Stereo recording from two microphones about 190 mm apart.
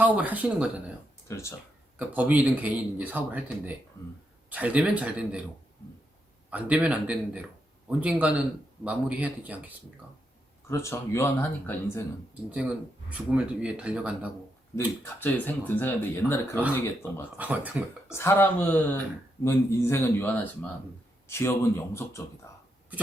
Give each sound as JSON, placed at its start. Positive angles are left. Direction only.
{"t": 0.0, "sound": "speech", "side_deg": -10}
{"t": 1.3, "sound": "speech", "side_deg": 15}
{"t": 2.0, "sound": "speech", "side_deg": -10}
{"t": 6.5, "sound": "speech", "side_deg": -10}
{"t": 10.7, "sound": "speech", "side_deg": 15}
{"t": 12.5, "sound": "speech", "side_deg": -5}
{"t": 15.0, "sound": "speech", "side_deg": 10}
{"t": 17.3, "sound": "speech", "side_deg": -10}
{"t": 18.1, "sound": "speech", "side_deg": 15}
{"t": 22.5, "sound": "a sound", "side_deg": 15}